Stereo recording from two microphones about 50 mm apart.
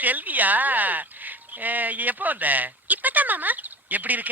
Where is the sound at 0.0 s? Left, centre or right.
Right.